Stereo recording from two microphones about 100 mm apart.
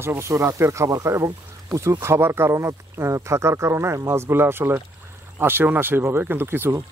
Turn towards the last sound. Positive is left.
turn(degrees=-20)  # may be behind; listen again after turning